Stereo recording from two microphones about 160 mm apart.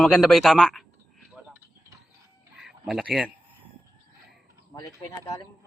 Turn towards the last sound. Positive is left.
turn(degrees=20)  # may be behind; listen again after turning